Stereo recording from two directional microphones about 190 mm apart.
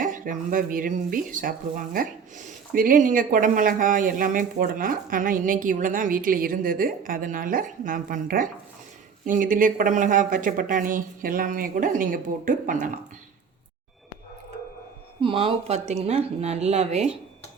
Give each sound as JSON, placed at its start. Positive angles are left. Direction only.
{"t": 0.0, "sound": "speech", "side_deg": -45}
{"t": 15.2, "sound": "speech", "side_deg": -30}